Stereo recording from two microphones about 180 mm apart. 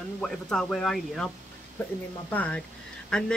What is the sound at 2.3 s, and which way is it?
Speech, 10° left (ahead or behind).